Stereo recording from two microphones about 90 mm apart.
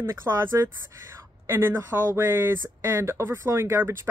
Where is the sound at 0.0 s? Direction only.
30° right (ahead or behind).